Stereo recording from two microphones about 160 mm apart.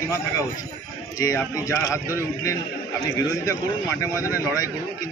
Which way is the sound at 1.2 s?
20° left (ahead or behind).